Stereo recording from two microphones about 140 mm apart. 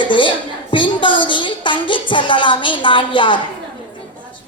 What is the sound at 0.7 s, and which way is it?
Music, 35° left (ahead or behind).